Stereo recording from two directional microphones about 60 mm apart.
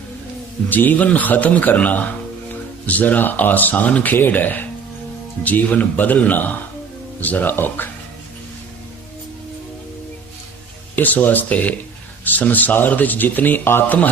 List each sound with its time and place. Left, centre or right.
0.7 s speech: left
10.9 s speech: left